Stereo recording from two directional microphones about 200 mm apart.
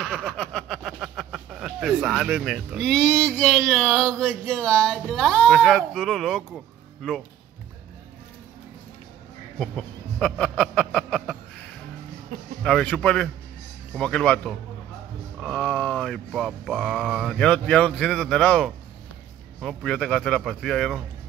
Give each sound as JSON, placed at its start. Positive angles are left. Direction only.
{"t": 0.0, "sound": "speech", "side_deg": 5}
{"t": 4.5, "sound": "mantra", "side_deg": 5}
{"t": 9.6, "sound": "a sound", "side_deg": 5}
{"t": 12.6, "sound": "mantra", "side_deg": 5}